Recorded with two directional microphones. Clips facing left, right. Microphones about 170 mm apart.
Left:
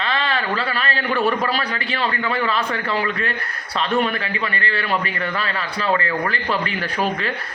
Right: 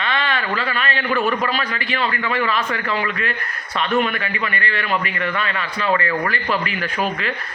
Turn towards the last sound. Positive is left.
turn(degrees=35)  # may be behind; listen again after turning